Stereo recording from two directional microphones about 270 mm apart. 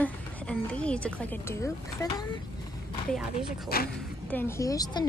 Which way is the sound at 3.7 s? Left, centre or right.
Left.